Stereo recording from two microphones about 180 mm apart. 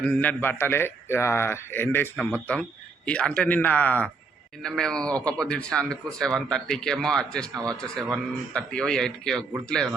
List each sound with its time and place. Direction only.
0.0 s a man's voice: 10° left (ahead or behind)